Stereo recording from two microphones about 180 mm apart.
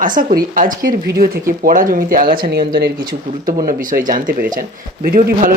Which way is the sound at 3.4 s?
50° right (ahead or behind).